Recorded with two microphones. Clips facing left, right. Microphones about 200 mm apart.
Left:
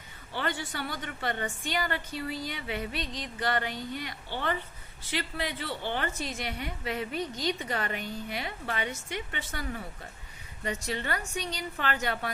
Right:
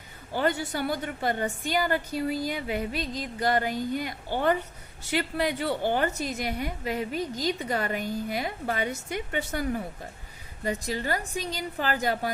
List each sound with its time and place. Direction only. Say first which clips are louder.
0.3 s a woman's voice: right 7 dB; 40° right (ahead or behind)